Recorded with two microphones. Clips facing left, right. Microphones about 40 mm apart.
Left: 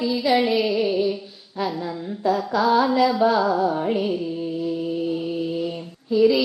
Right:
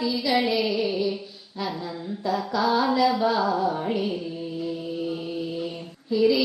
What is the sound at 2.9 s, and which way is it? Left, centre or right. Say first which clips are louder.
Carnatic music: left 3 dB; left.